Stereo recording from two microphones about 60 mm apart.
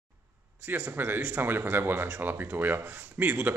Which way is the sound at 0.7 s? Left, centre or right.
Right.